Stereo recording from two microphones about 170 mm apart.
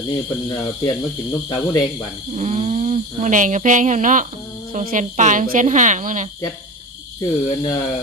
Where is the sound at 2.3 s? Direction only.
40° right (ahead or behind).